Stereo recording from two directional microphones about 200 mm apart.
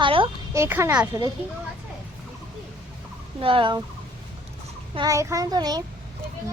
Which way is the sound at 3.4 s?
25° right (ahead or behind).